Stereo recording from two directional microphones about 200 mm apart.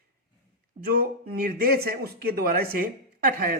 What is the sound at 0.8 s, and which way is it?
Speech, 45° right (ahead or behind).